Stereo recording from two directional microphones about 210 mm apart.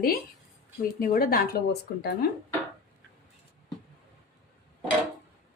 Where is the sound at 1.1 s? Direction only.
45° left (ahead or behind).